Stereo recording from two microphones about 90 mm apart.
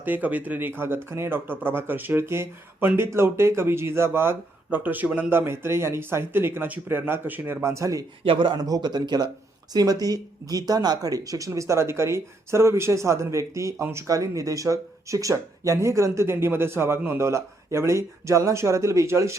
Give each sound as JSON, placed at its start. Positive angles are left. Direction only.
{"t": 0.0, "sound": "speech", "side_deg": -20}
{"t": 8.2, "sound": "speech", "side_deg": -75}
{"t": 8.5, "sound": "speech", "side_deg": -45}